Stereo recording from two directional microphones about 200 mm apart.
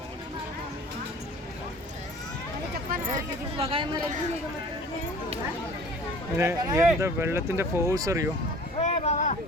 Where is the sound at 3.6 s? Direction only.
25° right (ahead or behind).